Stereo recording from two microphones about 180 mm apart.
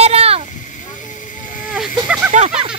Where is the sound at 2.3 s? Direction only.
40° right (ahead or behind).